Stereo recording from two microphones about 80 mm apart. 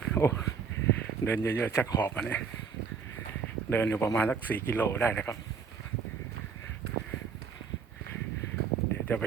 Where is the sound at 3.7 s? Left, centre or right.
Left.